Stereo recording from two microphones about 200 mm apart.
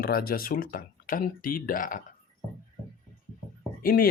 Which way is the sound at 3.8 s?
45° left (ahead or behind).